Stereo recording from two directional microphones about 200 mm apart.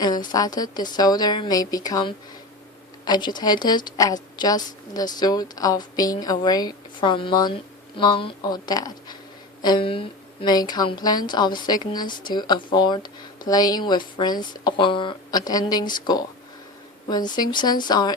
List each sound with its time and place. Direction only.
0.0 s a woman's voice: 20° left (ahead or behind)